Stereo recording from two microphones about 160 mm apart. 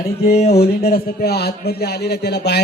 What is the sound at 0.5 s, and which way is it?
A man's voice, 80° left.